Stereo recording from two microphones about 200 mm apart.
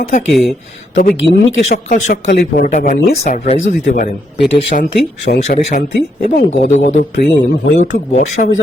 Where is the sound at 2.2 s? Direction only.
55° left (ahead or behind).